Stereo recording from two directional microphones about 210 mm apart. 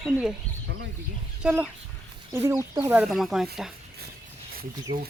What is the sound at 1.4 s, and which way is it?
Speech, 5° right (ahead or behind).